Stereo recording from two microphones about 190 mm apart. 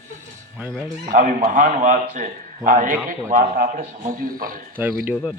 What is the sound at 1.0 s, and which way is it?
A man's voice, 45° right (ahead or behind).